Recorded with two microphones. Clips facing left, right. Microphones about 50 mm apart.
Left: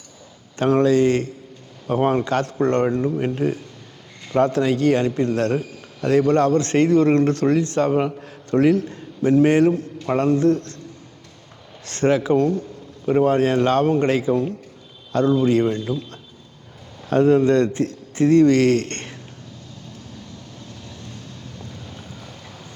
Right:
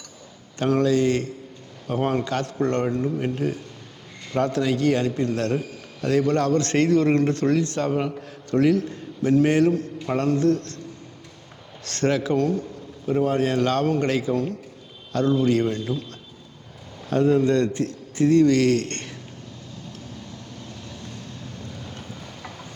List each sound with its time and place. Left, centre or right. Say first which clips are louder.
0.6 s a man's voice: left 4 dB; left
11.9 s a man's voice: left 4 dB; left
17.1 s a man's voice: left 4 dB; left